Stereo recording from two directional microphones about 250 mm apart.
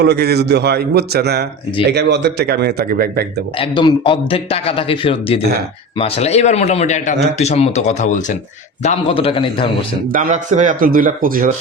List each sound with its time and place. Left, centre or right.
0.0 s speech: right
3.6 s a man's voice: centre
10.1 s speech: right